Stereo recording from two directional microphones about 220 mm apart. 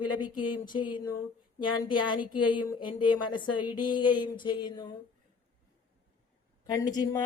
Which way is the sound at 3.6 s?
5° right (ahead or behind).